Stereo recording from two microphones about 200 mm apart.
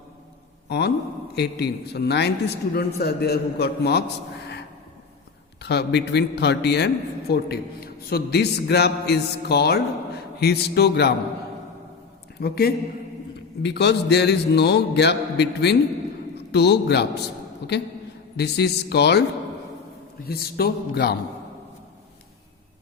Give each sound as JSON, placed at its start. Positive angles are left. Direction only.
{"t": 0.7, "sound": "a man's voice", "side_deg": 55}
{"t": 5.6, "sound": "a man's voice", "side_deg": 55}
{"t": 12.4, "sound": "a man's voice", "side_deg": 50}
{"t": 20.2, "sound": "a man's voice", "side_deg": 50}